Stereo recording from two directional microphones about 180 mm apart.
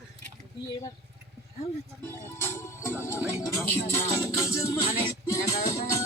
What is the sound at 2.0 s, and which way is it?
Music, 15° left (ahead or behind).